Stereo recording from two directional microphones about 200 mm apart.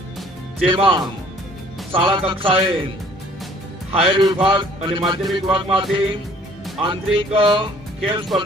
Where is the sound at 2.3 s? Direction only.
25° right (ahead or behind).